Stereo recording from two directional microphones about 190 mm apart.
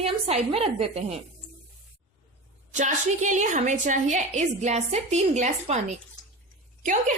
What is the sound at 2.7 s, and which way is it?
A woman's voice, 40° right (ahead or behind).